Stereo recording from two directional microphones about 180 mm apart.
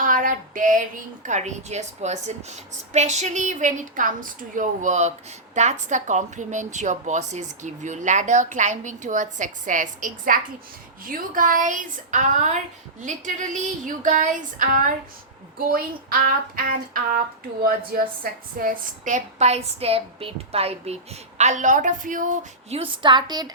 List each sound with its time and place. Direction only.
0.0 s a sound: 50° right (ahead or behind)
1.2 s a woman's voice: 40° right (ahead or behind)
22.8 s a woman's voice: 25° right (ahead or behind)